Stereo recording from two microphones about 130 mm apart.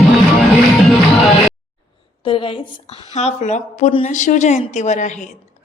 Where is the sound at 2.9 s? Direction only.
60° left (ahead or behind).